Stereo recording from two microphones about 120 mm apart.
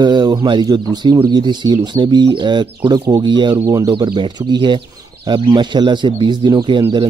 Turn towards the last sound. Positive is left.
turn(degrees=-40)  # may be behind; listen again after turning